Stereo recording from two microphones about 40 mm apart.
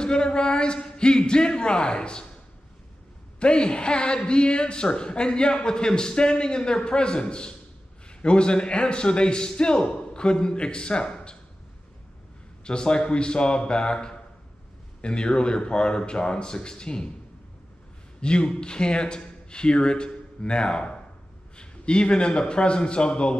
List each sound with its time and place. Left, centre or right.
0.0 s speech: left
3.3 s a man's voice: left
12.6 s a man's voice: left
18.2 s a man's voice: left